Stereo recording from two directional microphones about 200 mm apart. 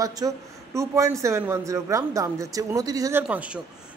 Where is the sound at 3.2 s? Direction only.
5° right (ahead or behind).